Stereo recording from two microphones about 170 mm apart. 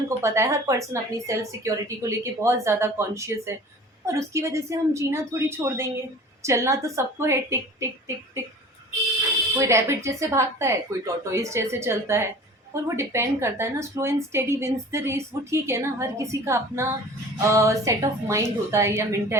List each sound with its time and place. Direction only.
0.2 s a woman's voice: 15° right (ahead or behind)
9.6 s a woman's voice: 15° right (ahead or behind)